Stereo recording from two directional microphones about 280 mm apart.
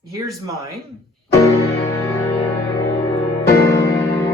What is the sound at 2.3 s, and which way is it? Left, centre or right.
Music, centre.